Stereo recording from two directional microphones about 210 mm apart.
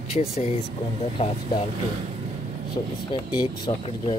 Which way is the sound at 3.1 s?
20° left (ahead or behind).